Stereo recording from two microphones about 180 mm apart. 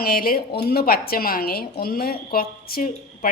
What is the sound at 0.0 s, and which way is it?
A woman's voice, 55° left (ahead or behind).